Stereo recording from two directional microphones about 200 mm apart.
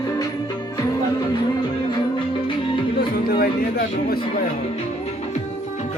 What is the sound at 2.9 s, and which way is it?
Music, 50° left (ahead or behind).